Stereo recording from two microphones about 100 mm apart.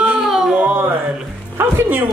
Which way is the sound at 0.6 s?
15° right (ahead or behind).